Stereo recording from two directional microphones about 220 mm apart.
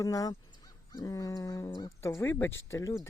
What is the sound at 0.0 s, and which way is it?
Speech, 15° left (ahead or behind).